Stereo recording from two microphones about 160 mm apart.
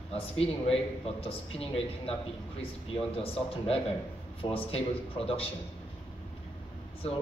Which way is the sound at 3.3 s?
35° left (ahead or behind).